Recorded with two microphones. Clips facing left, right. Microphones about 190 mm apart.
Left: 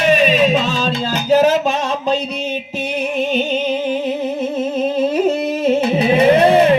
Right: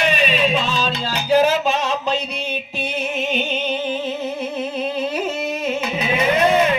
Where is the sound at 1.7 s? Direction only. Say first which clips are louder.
Left 2 dB; 45° left (ahead or behind).